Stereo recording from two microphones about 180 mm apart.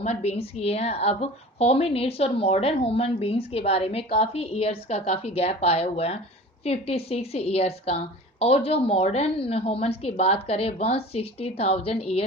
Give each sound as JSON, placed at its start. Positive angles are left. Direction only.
{"t": 0.0, "sound": "a woman's voice", "side_deg": 35}